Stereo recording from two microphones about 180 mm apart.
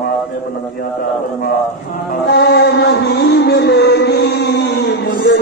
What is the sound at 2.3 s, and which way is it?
Music, 65° left (ahead or behind).